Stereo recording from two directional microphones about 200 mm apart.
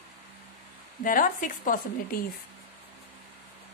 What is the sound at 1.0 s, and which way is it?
Speech, 40° left (ahead or behind).